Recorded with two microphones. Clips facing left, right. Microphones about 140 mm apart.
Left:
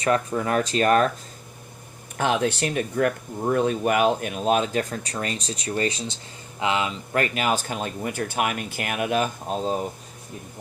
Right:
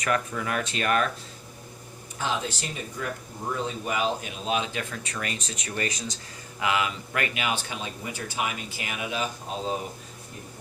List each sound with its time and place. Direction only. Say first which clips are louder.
0.0 s speech: left 5 dB; 30° left (ahead or behind)
2.1 s speech: left 7 dB; 60° left (ahead or behind)